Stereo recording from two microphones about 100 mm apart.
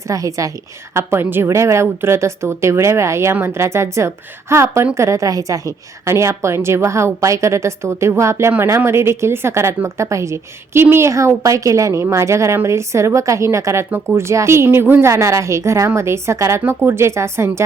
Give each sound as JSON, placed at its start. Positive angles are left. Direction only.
{"t": 0.1, "sound": "a woman's voice", "side_deg": -35}
{"t": 0.9, "sound": "a woman's voice", "side_deg": -25}
{"t": 16.6, "sound": "a woman's voice", "side_deg": -20}